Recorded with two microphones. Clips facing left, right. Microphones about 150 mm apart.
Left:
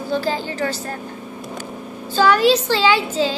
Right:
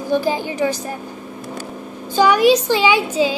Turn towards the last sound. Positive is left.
turn(degrees=-15)  # may be behind; listen again after turning